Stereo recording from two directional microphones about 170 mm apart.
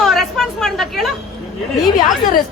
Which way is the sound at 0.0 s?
Centre (ahead or behind).